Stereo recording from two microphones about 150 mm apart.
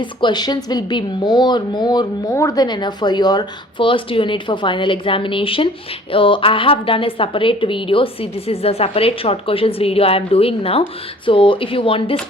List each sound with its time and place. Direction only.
0.0 s a woman's voice: 30° left (ahead or behind)